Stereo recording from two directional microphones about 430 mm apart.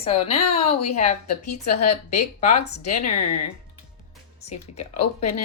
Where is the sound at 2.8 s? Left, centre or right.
Left.